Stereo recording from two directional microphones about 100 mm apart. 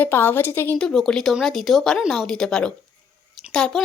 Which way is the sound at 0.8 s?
5° left (ahead or behind).